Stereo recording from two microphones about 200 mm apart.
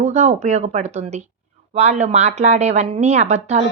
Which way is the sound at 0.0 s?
35° right (ahead or behind).